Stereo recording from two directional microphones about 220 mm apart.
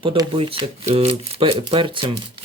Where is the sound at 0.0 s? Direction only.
25° right (ahead or behind).